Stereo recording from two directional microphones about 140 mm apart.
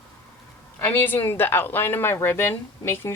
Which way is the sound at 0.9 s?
15° left (ahead or behind).